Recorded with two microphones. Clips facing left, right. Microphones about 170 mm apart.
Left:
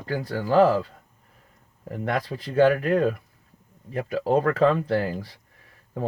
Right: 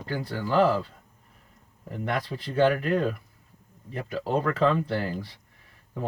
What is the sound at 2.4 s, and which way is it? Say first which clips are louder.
Speech: left 4 dB; 40° left (ahead or behind).